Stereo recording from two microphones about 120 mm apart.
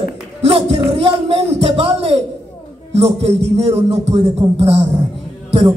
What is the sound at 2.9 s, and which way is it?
A man's voice, 55° right (ahead or behind).